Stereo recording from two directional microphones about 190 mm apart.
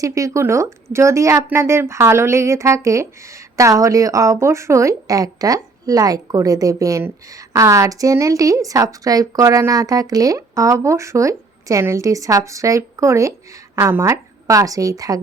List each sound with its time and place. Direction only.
0.0 s a woman's voice: 15° right (ahead or behind)